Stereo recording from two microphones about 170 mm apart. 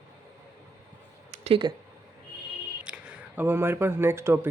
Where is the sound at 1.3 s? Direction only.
35° right (ahead or behind).